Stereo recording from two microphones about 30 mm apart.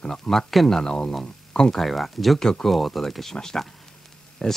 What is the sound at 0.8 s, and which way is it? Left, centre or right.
Speech, left.